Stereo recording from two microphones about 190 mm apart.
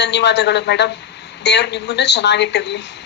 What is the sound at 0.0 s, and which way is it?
Speech, 65° left (ahead or behind).